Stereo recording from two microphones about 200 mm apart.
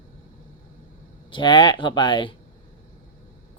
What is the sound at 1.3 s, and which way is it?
Speech, 25° left (ahead or behind).